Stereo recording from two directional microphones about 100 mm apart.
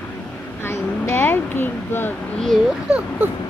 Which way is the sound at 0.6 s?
25° left (ahead or behind).